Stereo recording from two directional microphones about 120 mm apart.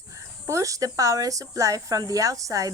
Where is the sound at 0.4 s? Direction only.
25° right (ahead or behind).